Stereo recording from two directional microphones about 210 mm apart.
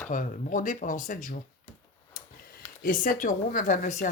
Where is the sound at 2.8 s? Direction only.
40° left (ahead or behind).